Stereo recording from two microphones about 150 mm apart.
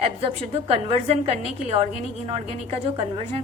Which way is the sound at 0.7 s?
40° right (ahead or behind).